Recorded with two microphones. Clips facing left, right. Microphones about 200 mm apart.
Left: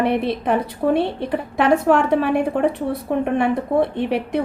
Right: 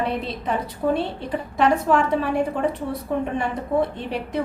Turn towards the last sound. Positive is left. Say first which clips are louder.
# left 6 dB
turn(degrees=65)  # may be behind; listen again after turning